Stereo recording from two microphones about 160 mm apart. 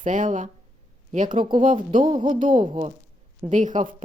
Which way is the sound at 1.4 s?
30° right (ahead or behind).